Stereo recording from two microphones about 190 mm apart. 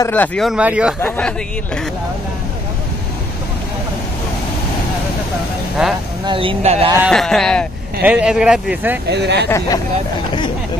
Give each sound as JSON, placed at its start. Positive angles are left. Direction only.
{"t": 0.0, "sound": "speech", "side_deg": 10}
{"t": 1.0, "sound": "speech", "side_deg": 10}
{"t": 5.8, "sound": "speech", "side_deg": -5}
{"t": 6.2, "sound": "speech", "side_deg": -30}
{"t": 7.1, "sound": "speech", "side_deg": 0}
{"t": 9.1, "sound": "speech", "side_deg": -65}